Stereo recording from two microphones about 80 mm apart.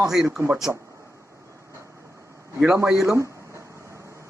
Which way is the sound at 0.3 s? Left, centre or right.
Right.